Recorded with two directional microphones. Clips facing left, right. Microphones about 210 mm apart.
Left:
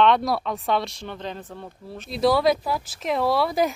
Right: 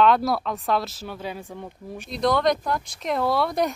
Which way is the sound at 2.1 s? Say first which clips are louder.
Left 2 dB; 5° left (ahead or behind).